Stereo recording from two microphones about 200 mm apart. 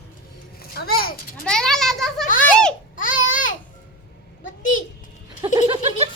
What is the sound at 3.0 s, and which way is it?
Babbling, 40° left (ahead or behind).